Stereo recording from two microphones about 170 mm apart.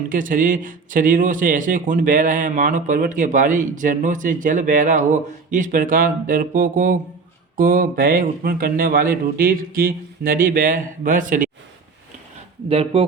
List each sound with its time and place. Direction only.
0.1 s speech: 50° right (ahead or behind)
12.6 s speech: 35° right (ahead or behind)